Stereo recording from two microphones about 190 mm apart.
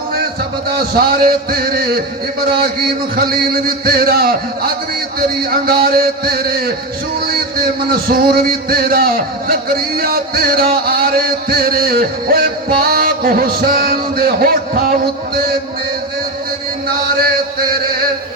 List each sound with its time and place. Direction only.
0.8 s speech: 50° right (ahead or behind)
3.2 s speech: 50° right (ahead or behind)